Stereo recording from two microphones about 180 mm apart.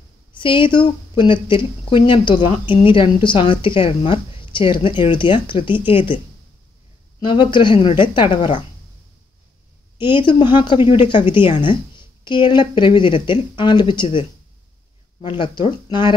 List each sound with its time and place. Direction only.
0.4 s a woman's voice: 25° left (ahead or behind)
9.9 s a woman's voice: 25° left (ahead or behind)
15.2 s a woman's voice: 25° left (ahead or behind)